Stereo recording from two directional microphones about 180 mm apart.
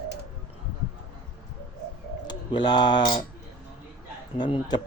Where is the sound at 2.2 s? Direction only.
25° left (ahead or behind).